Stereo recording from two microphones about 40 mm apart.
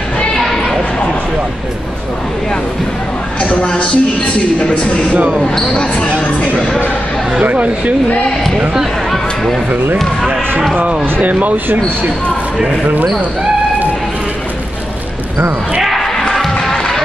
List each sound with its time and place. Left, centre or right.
0.4 s a sound: centre
3.4 s a woman's voice: left
5.1 s speech: right
5.8 s speech: left
7.4 s speech: right
9.1 s speech: centre
11.1 s speech: right
16.0 s music: centre